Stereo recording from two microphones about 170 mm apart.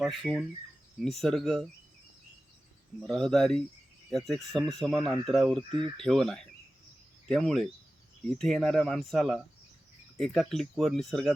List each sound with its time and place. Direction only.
0.0 s speech: centre (ahead or behind)
3.1 s speech: 5° left (ahead or behind)